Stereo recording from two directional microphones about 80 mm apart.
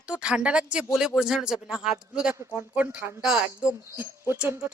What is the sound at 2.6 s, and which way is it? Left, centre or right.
Speech, right.